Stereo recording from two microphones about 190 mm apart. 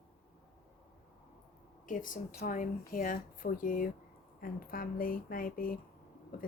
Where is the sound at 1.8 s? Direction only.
45° left (ahead or behind).